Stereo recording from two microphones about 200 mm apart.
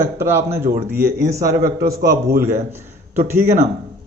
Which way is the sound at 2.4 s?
15° right (ahead or behind).